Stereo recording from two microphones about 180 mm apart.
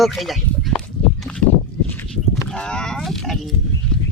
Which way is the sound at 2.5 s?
5° left (ahead or behind).